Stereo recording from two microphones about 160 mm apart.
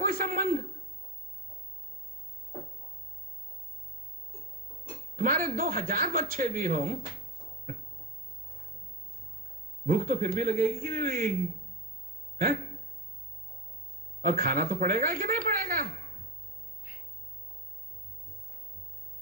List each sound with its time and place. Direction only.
0.0 s a sound: 60° right (ahead or behind)
5.1 s a man's voice: 55° right (ahead or behind)
9.8 s a man's voice: 60° right (ahead or behind)
14.2 s a man's voice: 60° right (ahead or behind)